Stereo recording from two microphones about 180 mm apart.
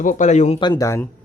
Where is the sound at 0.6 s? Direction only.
20° left (ahead or behind).